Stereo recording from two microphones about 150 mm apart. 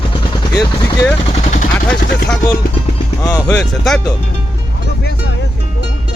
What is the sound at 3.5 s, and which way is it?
Speech, 5° left (ahead or behind).